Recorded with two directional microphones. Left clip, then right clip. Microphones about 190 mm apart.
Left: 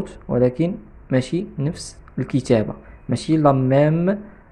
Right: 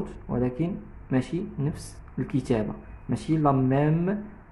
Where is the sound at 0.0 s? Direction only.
30° left (ahead or behind).